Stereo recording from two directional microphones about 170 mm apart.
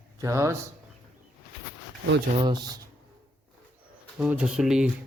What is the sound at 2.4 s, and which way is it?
Speech, 25° right (ahead or behind).